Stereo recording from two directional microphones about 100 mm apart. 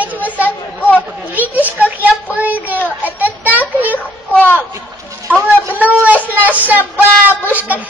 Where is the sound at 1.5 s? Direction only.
15° right (ahead or behind).